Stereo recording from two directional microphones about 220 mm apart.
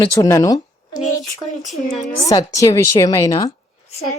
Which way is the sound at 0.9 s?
35° left (ahead or behind).